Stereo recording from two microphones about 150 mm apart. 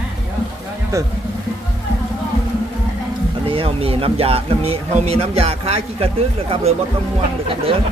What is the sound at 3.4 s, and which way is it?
Speech, 35° right (ahead or behind).